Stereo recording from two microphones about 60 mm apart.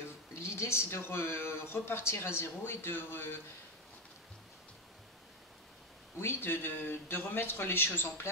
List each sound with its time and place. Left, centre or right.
0.3 s speech: left
6.1 s speech: left